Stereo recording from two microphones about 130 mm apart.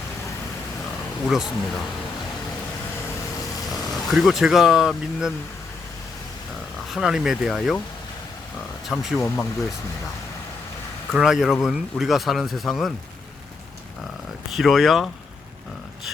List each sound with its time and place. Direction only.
1.3 s speech: centre (ahead or behind)
4.1 s speech: centre (ahead or behind)
6.9 s speech: 5° right (ahead or behind)
8.9 s speech: 5° left (ahead or behind)
9.2 s speech: 20° left (ahead or behind)
11.1 s speech: 5° right (ahead or behind)
14.5 s speech: centre (ahead or behind)